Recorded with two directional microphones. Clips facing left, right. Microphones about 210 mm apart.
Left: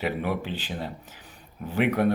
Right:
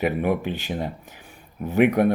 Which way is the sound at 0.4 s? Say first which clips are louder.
Right 5 dB; 15° right (ahead or behind).